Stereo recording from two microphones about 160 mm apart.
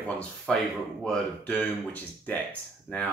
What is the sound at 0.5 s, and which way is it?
Speech, 5° left (ahead or behind).